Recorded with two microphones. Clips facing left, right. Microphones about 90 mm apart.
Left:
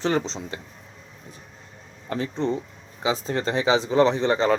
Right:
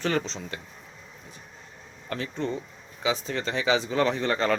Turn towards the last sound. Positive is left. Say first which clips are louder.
# left 5 dB
turn(degrees=25)  # may be behind; listen again after turning